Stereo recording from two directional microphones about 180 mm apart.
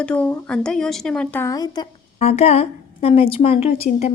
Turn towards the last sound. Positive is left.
turn(degrees=35)  # may be behind; listen again after turning